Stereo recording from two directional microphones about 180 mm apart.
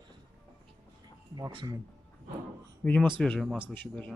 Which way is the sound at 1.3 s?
25° right (ahead or behind).